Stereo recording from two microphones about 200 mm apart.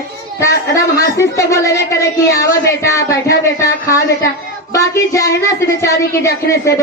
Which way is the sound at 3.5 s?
15° left (ahead or behind).